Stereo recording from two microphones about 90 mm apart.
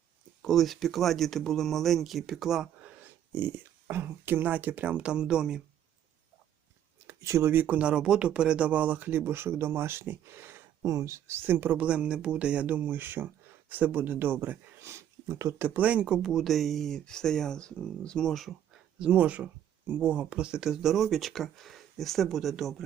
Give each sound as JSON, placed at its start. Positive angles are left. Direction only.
{"t": 0.4, "sound": "speech", "side_deg": 0}
{"t": 3.0, "sound": "speech", "side_deg": -25}
{"t": 7.1, "sound": "speech", "side_deg": -35}
{"t": 18.9, "sound": "speech", "side_deg": -10}